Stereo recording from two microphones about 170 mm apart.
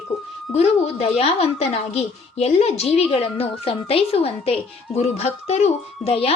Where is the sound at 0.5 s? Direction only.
35° left (ahead or behind).